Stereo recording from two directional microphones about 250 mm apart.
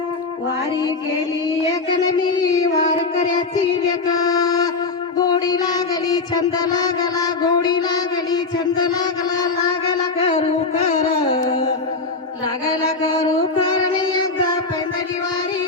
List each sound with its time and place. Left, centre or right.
2.0 s carnatic music: centre
4.0 s music: centre
5.2 s child singing: centre
9.9 s music: left